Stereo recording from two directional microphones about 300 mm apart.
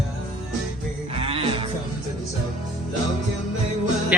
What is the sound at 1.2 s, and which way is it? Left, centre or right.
Cattle, centre.